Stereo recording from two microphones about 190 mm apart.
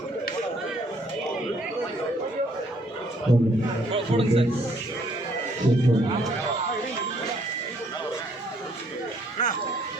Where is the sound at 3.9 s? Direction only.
30° right (ahead or behind).